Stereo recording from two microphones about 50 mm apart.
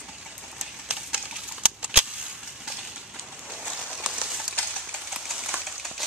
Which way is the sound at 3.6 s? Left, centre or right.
Centre.